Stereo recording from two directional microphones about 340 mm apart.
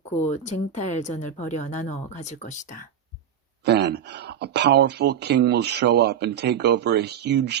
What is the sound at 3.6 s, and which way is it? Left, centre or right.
Speech, right.